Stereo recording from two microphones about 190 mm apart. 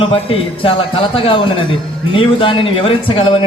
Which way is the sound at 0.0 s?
30° left (ahead or behind).